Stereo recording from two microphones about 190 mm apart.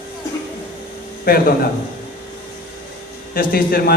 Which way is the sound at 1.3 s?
50° left (ahead or behind).